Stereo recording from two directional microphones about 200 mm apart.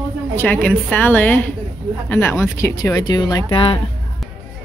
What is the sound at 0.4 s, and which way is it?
Speech, 10° left (ahead or behind).